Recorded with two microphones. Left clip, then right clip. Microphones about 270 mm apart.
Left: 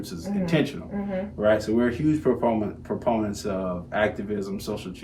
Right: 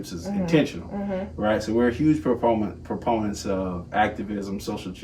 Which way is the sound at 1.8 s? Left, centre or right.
Centre.